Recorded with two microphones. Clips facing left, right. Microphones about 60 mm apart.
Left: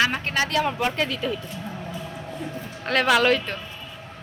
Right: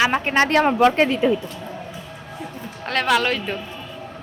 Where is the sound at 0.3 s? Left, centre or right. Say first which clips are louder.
Right 7 dB; right.